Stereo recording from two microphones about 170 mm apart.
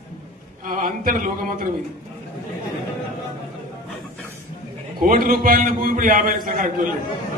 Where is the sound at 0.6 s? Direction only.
55° right (ahead or behind).